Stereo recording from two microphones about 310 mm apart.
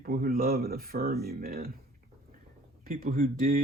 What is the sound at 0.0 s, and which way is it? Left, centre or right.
Speech, right.